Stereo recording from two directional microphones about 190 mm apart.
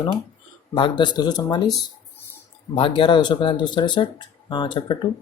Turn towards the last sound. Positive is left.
turn(degrees=25)  # may be behind; listen again after turning